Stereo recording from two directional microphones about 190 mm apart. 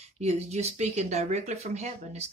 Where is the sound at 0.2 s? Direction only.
35° right (ahead or behind).